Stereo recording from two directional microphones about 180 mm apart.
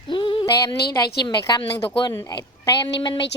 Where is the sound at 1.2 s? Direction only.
25° left (ahead or behind).